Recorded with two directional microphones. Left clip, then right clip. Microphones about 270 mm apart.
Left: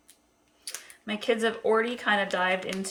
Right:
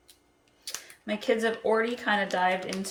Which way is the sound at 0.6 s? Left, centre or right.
Centre.